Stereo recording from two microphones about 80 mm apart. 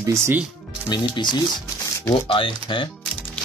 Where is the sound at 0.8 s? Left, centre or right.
Left.